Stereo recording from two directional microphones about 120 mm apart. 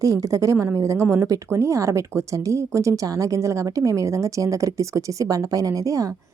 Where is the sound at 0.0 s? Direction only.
30° right (ahead or behind).